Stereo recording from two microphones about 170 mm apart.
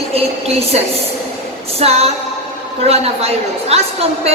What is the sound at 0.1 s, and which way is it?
Speech, 35° right (ahead or behind).